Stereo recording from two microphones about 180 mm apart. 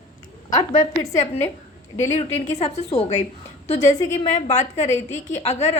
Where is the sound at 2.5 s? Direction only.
40° left (ahead or behind).